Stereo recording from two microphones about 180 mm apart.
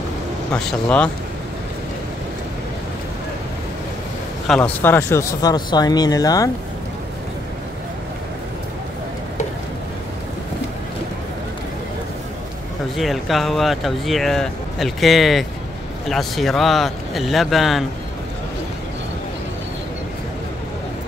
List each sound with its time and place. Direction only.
0.5 s speech: 5° left (ahead or behind)
4.5 s speech: 5° left (ahead or behind)
12.9 s speech: centre (ahead or behind)